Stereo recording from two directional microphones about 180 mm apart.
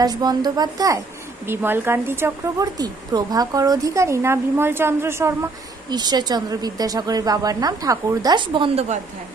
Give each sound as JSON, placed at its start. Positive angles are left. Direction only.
{"t": 0.0, "sound": "a woman's voice", "side_deg": -20}